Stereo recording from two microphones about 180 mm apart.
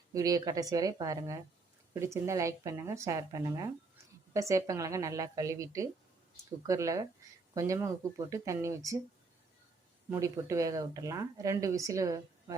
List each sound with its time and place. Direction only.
0.1 s speech: 20° right (ahead or behind)
10.1 s speech: 15° right (ahead or behind)